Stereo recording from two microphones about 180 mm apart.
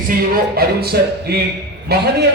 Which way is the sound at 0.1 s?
55° right (ahead or behind).